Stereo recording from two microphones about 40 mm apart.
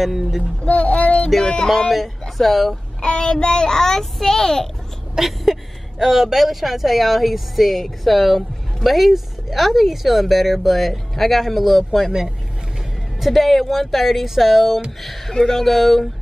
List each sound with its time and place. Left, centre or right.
0.0 s speech: centre
0.7 s speech: left
1.4 s music: centre
1.9 s speech: centre
3.0 s a child's voice: left
5.1 s speech: centre
13.2 s speech: centre